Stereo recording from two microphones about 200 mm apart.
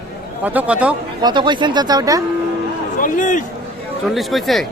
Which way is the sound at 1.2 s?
20° right (ahead or behind).